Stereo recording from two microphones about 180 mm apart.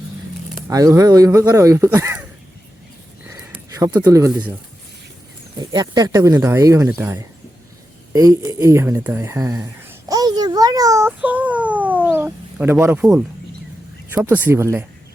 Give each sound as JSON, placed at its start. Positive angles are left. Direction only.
{"t": 0.7, "sound": "speech", "side_deg": -20}
{"t": 3.8, "sound": "speech", "side_deg": -15}
{"t": 5.5, "sound": "speech", "side_deg": -25}
{"t": 8.1, "sound": "a sound", "side_deg": -20}
{"t": 14.1, "sound": "speech", "side_deg": -10}